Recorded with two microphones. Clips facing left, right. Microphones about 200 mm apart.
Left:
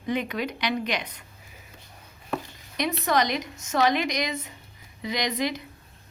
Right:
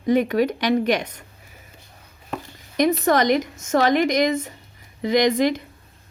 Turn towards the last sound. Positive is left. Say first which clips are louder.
# right 10 dB
turn(degrees=-50)  # may be behind; listen again after turning